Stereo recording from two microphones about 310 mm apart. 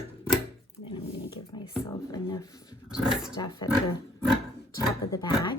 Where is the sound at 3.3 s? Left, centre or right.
Centre.